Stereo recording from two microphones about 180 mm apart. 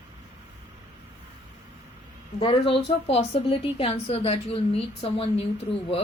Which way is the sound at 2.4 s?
30° left (ahead or behind).